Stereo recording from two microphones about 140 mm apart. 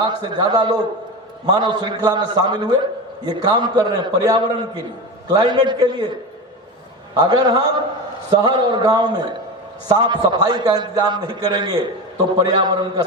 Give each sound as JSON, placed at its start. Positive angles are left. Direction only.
{"t": 0.2, "sound": "a man's voice", "side_deg": -30}
{"t": 7.1, "sound": "a man's voice", "side_deg": -30}